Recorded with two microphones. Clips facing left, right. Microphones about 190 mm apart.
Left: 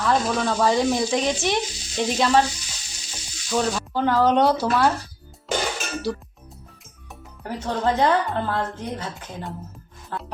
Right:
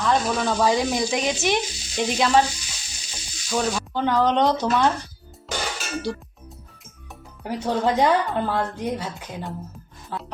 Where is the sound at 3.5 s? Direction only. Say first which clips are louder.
Left 1 dB; centre (ahead or behind).